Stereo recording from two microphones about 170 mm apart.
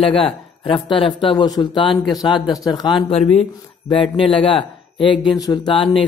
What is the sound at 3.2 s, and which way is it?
Speech, 40° left (ahead or behind).